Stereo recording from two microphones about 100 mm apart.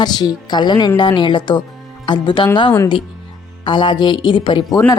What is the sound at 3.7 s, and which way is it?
Speech, 55° left (ahead or behind).